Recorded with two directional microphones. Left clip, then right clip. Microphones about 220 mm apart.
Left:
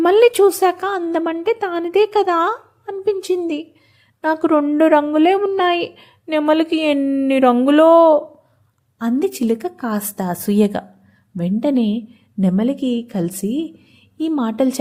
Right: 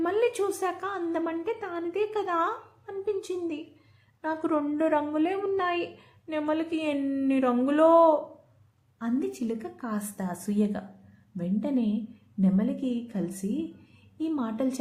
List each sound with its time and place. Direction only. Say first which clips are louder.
0.0 s a woman's voice: left 15 dB; 45° left (ahead or behind)